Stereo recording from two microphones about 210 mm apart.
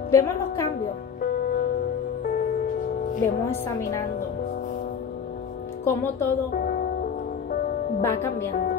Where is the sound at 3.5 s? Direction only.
15° left (ahead or behind).